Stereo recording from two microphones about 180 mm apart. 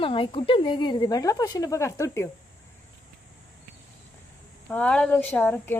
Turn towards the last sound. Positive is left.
turn(degrees=10)  # may be behind; listen again after turning